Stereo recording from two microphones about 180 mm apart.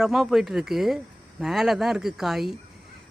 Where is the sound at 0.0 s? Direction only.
Centre (ahead or behind).